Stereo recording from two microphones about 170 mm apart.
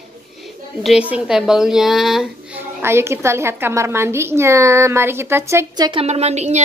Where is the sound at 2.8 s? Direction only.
15° right (ahead or behind).